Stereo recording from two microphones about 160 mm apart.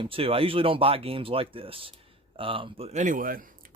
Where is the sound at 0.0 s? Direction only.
35° right (ahead or behind).